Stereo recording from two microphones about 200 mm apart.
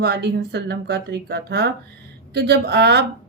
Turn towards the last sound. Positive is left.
turn(degrees=-55)  # may be behind; listen again after turning